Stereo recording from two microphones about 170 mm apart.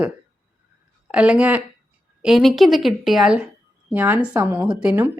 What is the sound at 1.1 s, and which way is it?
A woman's voice, 5° right (ahead or behind).